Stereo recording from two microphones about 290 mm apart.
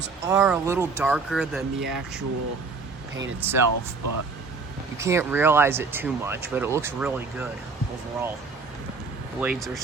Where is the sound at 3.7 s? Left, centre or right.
Right.